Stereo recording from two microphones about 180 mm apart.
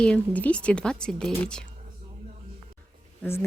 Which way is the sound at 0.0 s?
5° left (ahead or behind).